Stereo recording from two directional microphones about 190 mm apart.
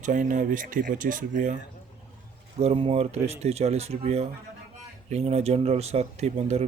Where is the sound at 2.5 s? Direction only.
30° right (ahead or behind).